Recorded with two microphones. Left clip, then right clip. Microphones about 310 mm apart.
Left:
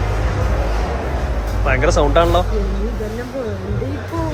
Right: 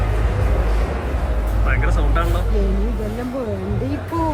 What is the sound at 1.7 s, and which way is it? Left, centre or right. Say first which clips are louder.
Speech: left 10 dB; centre.